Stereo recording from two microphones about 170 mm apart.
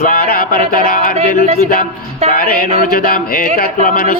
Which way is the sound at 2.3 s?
60° left (ahead or behind).